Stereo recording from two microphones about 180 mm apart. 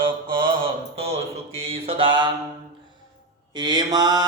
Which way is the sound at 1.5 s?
30° right (ahead or behind).